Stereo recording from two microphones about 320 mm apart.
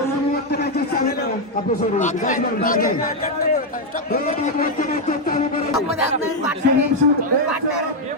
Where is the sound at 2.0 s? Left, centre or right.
Left.